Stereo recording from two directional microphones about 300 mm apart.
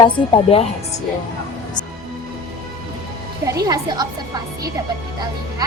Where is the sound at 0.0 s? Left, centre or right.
Centre.